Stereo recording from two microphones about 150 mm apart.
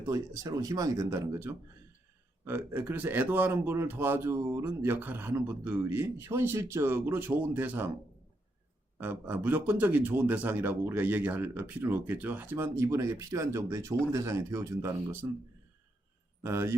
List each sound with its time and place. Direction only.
0.0 s speech: 20° right (ahead or behind)
9.0 s speech: 15° right (ahead or behind)
16.4 s speech: 20° right (ahead or behind)